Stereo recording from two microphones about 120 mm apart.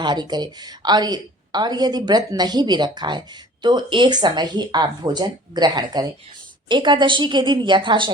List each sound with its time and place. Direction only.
0.0 s a woman's voice: 35° right (ahead or behind)